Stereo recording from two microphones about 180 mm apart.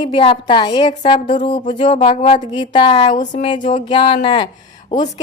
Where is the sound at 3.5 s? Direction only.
30° left (ahead or behind).